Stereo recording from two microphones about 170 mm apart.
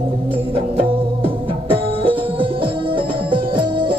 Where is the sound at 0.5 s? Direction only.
30° right (ahead or behind).